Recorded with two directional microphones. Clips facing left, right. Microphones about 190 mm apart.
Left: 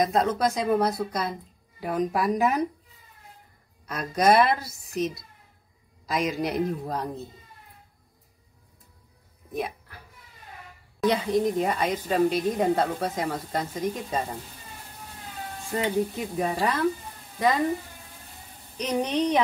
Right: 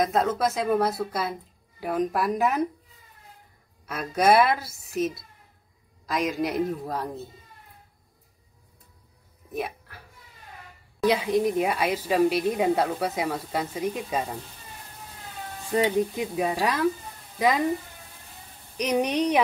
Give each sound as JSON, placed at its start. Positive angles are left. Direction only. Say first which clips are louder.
{"t": 0.0, "sound": "a woman's voice", "louder": "even", "side_deg": 0}
{"t": 3.8, "sound": "a woman's voice", "louder": "even", "side_deg": -5}
{"t": 9.5, "sound": "speech", "louder": "even", "side_deg": -5}
{"t": 11.1, "sound": "a woman's voice", "louder": "right 1 dB", "side_deg": -10}
{"t": 15.7, "sound": "a woman's voice", "louder": "right 3 dB", "side_deg": -10}
{"t": 18.8, "sound": "a woman's voice", "louder": "right 2 dB", "side_deg": -10}